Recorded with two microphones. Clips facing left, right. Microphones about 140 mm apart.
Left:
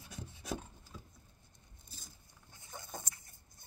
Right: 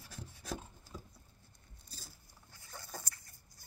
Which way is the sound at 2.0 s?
20° left (ahead or behind).